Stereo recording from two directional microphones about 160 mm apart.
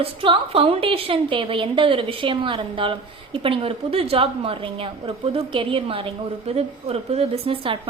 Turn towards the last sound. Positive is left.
turn(degrees=-35)  # may be behind; listen again after turning